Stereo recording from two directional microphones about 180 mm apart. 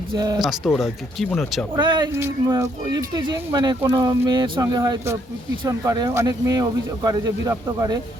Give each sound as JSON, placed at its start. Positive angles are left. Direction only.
{"t": 0.1, "sound": "speech", "side_deg": -20}
{"t": 0.3, "sound": "speech", "side_deg": 0}
{"t": 1.7, "sound": "speech", "side_deg": -25}